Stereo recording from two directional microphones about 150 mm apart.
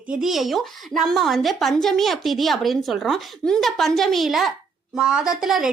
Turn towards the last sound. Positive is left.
turn(degrees=-5)  # may be behind; listen again after turning